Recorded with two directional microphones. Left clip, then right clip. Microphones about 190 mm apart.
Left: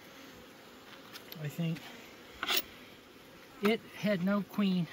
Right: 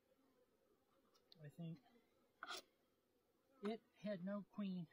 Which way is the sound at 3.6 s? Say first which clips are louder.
Left 18 dB; centre (ahead or behind).